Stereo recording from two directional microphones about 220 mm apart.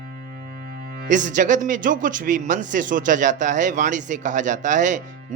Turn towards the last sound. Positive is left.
turn(degrees=-35)  # may be behind; listen again after turning